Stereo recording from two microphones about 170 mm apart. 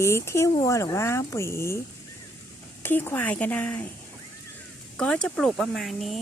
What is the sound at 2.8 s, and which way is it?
Speech, 10° left (ahead or behind).